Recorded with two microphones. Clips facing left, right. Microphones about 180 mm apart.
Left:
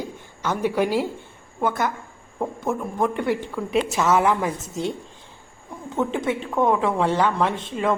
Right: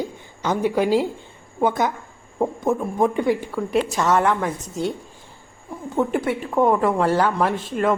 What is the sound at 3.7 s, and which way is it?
Speech, centre (ahead or behind).